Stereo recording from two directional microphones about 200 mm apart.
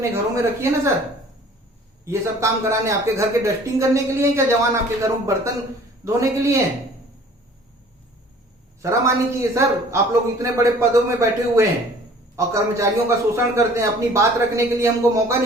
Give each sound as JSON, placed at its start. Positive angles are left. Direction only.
{"t": 0.1, "sound": "speech", "side_deg": -15}
{"t": 2.0, "sound": "speech", "side_deg": -15}
{"t": 8.8, "sound": "speech", "side_deg": -15}